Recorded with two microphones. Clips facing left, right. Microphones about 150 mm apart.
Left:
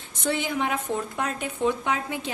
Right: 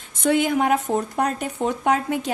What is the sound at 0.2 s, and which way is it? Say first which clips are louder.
A woman's voice: right 7 dB; 50° right (ahead or behind).